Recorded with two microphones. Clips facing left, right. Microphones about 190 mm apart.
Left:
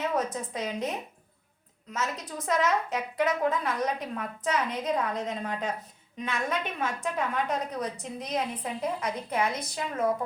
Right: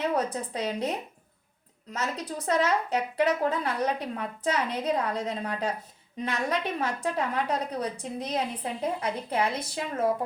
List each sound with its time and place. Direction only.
0.0 s a sound: 30° right (ahead or behind)
0.5 s a woman's voice: 35° right (ahead or behind)
1.9 s a woman's voice: 30° right (ahead or behind)